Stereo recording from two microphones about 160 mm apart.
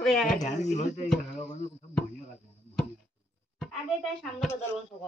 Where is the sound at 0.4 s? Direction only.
45° left (ahead or behind).